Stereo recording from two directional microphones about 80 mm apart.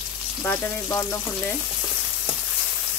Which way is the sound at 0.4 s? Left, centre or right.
Left.